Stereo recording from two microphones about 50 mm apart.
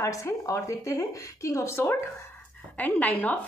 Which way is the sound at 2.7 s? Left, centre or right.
Left.